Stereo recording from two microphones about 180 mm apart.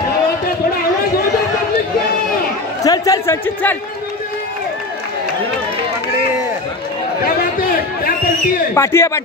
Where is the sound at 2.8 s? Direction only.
20° left (ahead or behind).